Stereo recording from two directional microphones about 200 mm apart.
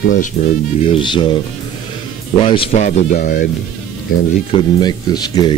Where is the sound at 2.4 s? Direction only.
25° left (ahead or behind); by 3.4 s 45° left (ahead or behind).